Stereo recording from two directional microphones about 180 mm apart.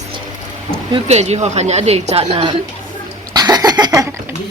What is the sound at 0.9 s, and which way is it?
A woman's voice, 35° right (ahead or behind).